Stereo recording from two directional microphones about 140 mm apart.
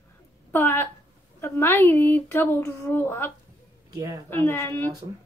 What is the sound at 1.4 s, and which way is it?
Speech, 15° left (ahead or behind).